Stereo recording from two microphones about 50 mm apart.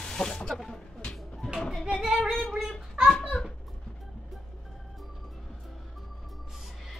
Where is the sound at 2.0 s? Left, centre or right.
Centre.